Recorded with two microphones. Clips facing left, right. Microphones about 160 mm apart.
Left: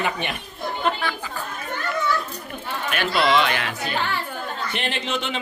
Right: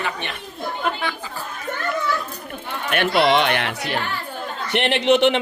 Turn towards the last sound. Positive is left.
turn(degrees=-70)  # may be behind; listen again after turning